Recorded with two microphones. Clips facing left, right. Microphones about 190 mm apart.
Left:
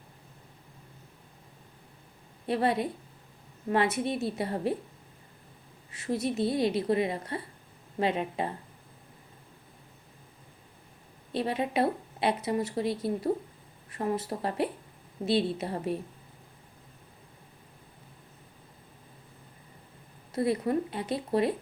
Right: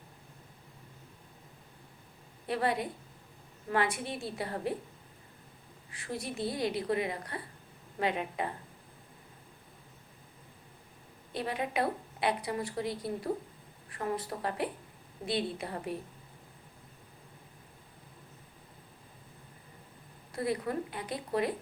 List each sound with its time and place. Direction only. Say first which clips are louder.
2.5 s speech: left 4 dB; 25° left (ahead or behind)
5.9 s speech: left 8 dB; 25° left (ahead or behind)
11.3 s speech: left 5 dB; 25° left (ahead or behind)
20.3 s speech: left 5 dB; 25° left (ahead or behind)